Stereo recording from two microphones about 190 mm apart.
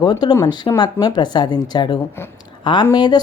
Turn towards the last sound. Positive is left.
turn(degrees=20)  # may be behind; listen again after turning